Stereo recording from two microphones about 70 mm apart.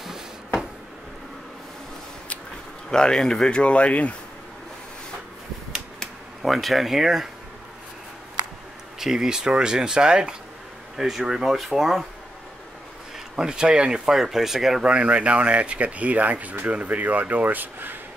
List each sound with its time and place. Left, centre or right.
0.0 s a sound: centre
2.9 s speech: centre
5.9 s speech: centre
9.0 s speech: centre
13.4 s speech: centre
14.9 s speech: centre